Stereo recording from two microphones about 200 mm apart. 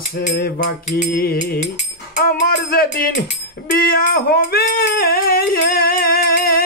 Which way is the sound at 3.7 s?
45° left (ahead or behind).